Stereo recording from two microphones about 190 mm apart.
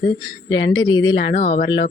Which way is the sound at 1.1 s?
45° left (ahead or behind).